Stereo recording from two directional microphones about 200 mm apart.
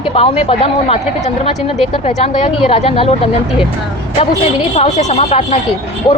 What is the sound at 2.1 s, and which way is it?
A woman's voice, 30° left (ahead or behind).